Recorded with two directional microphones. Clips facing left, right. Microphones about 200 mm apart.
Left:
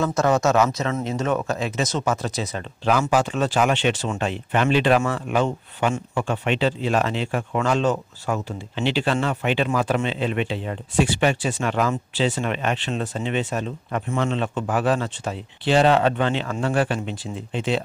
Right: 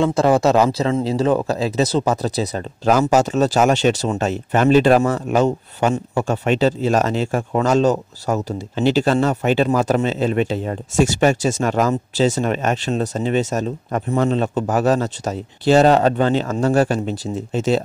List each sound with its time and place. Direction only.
0.0 s speech: 30° right (ahead or behind)